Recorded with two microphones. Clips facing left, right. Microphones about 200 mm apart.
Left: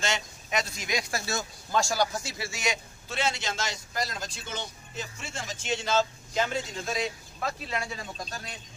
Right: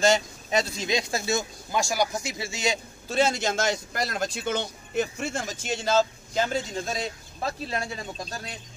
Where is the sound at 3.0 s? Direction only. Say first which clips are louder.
Right 7 dB; 40° right (ahead or behind).